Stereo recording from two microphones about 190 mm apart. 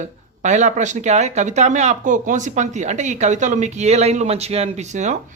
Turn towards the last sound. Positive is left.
turn(degrees=-40)  # may be behind; listen again after turning